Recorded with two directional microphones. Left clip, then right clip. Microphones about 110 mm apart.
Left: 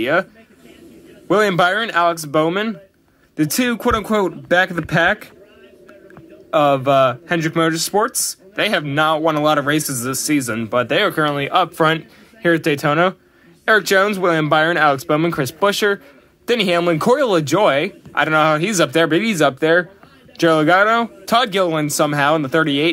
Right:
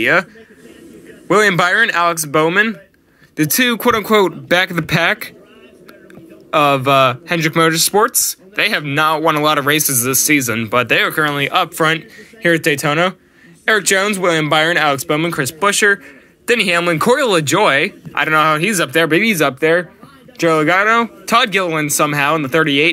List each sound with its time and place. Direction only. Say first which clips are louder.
0.0 s speech: right 4 dB; centre (ahead or behind)
1.2 s a sound: right 3 dB; centre (ahead or behind)
1.8 s speech: right 3 dB; centre (ahead or behind); by 5.3 s 15° right (ahead or behind)
6.5 s speech: right 2 dB; 10° right (ahead or behind)
11.0 s speech: right 2 dB; 10° left (ahead or behind)
11.3 s speech: right 1 dB; centre (ahead or behind)
11.6 s speech: right 1 dB; 10° left (ahead or behind)
12.4 s speech: right 2 dB; centre (ahead or behind)
15.1 s speech: right 1 dB; 15° left (ahead or behind)